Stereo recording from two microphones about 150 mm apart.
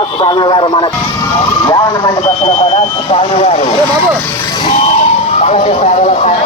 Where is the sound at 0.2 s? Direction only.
30° left (ahead or behind).